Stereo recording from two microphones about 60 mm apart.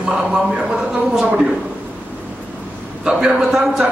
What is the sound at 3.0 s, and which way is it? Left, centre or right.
Speech, centre.